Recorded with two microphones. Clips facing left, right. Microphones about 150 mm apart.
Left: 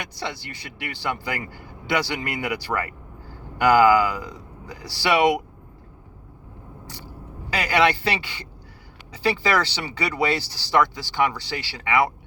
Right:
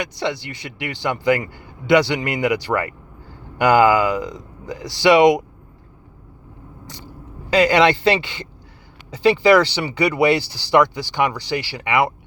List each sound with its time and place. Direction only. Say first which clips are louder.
0.2 s speech: right 8 dB; 20° right (ahead or behind)
6.8 s vehicle: right 3 dB; 20° right (ahead or behind)
7.5 s speech: right 6 dB; 25° right (ahead or behind)